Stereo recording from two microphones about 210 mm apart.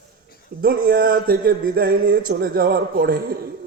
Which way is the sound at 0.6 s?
45° right (ahead or behind).